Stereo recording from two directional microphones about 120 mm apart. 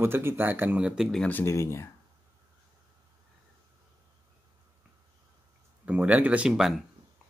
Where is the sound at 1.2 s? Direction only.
20° left (ahead or behind).